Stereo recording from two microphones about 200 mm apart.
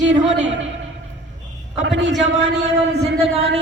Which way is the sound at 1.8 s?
65° right (ahead or behind).